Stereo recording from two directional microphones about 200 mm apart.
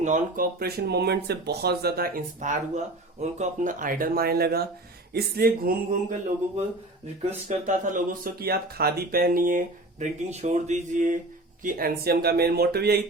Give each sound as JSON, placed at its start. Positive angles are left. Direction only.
{"t": 0.0, "sound": "speech", "side_deg": -40}
{"t": 7.2, "sound": "speech", "side_deg": -35}